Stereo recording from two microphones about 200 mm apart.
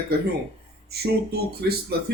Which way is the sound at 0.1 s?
55° right (ahead or behind).